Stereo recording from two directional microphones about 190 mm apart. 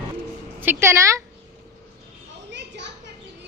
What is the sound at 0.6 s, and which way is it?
Speech, 10° right (ahead or behind).